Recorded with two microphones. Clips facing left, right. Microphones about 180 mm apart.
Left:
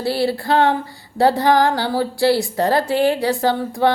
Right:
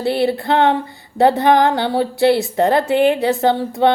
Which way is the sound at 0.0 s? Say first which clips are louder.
Right 2 dB; 20° right (ahead or behind).